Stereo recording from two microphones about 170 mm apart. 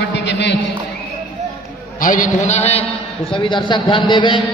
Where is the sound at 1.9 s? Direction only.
50° left (ahead or behind).